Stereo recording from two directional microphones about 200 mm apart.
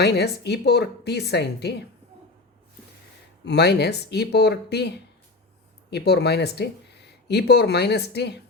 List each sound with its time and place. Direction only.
0.0 s a woman's voice: 55° left (ahead or behind)
3.4 s a woman's voice: 55° left (ahead or behind)